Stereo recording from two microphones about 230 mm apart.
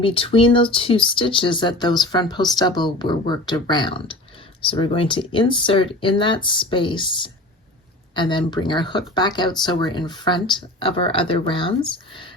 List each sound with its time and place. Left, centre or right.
0.0 s speech: left